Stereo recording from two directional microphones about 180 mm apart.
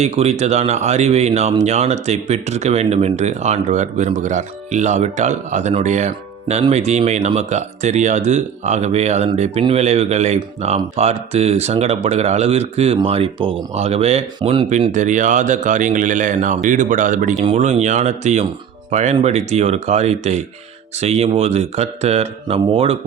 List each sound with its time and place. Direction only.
0.0 s speech: 35° right (ahead or behind)